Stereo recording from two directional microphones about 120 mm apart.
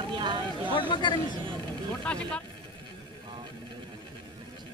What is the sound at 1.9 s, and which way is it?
Vehicle, 10° left (ahead or behind).